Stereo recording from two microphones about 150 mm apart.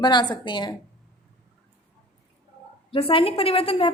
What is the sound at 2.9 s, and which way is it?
A woman's voice, 40° left (ahead or behind).